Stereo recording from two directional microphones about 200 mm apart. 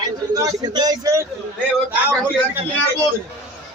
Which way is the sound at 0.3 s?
20° right (ahead or behind).